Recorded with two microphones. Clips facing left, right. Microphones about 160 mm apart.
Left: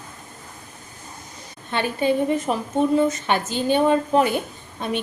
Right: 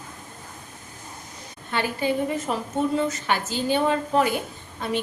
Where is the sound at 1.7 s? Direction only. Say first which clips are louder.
Left 3 dB; 20° left (ahead or behind).